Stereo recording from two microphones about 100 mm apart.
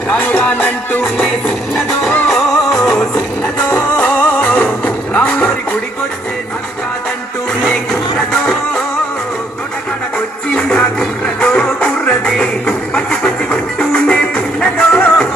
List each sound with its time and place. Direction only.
0.1 s music: 10° left (ahead or behind)
3.7 s music: 20° left (ahead or behind)
7.6 s music: 5° left (ahead or behind)
10.5 s music: 10° left (ahead or behind)